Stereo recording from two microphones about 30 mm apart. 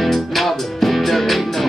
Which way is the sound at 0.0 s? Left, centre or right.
Centre.